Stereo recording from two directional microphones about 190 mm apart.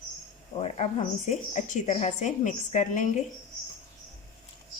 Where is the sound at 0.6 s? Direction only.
35° left (ahead or behind).